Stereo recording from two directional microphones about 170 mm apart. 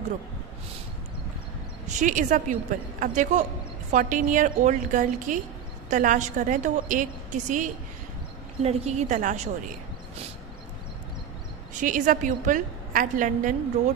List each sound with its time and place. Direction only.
1.9 s a woman's voice: 45° right (ahead or behind)
11.8 s a woman's voice: 50° right (ahead or behind)